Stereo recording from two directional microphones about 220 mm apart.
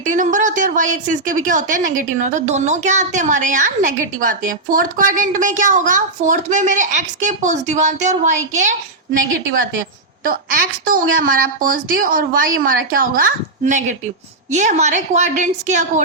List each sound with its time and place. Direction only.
0.1 s a woman's voice: 35° right (ahead or behind)
10.2 s a woman's voice: 40° right (ahead or behind)